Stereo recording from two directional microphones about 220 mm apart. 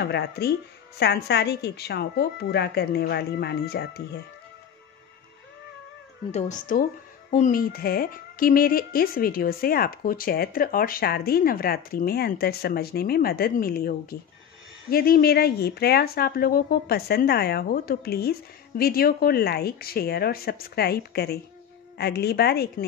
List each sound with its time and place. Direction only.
0.0 s speech: 45° left (ahead or behind)
6.3 s speech: 35° left (ahead or behind)